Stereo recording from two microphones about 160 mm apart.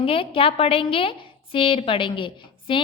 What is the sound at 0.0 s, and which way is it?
A woman's voice, 35° left (ahead or behind).